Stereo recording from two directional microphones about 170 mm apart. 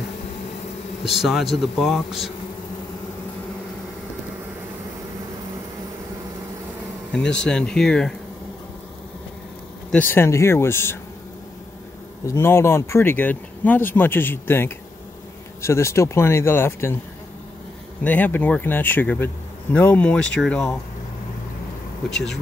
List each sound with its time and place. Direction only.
1.0 s speech: centre (ahead or behind)
7.2 s speech: 5° left (ahead or behind)
9.8 s speech: 10° left (ahead or behind)
12.3 s speech: 15° left (ahead or behind)
18.0 s speech: 10° left (ahead or behind)
22.1 s speech: 5° left (ahead or behind)